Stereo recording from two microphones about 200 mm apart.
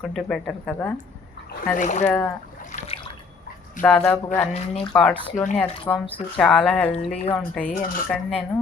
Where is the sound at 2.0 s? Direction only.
10° left (ahead or behind).